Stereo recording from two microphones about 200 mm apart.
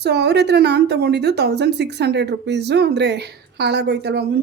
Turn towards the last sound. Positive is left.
turn(degrees=-55)  # may be behind; listen again after turning